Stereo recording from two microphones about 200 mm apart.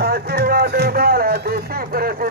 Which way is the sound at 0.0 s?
50° right (ahead or behind).